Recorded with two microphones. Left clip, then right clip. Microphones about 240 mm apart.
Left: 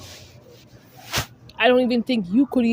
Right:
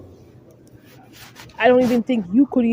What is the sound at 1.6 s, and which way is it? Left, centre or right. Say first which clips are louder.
A woman's voice: right 2 dB; left.